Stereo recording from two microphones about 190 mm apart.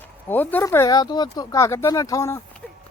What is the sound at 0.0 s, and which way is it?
Speech, 10° left (ahead or behind).